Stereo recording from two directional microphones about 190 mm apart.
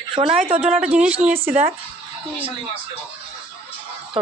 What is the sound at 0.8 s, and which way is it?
Speech, 5° right (ahead or behind).